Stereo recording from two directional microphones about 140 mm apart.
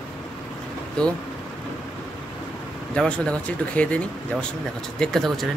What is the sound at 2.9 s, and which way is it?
Speech, 5° left (ahead or behind).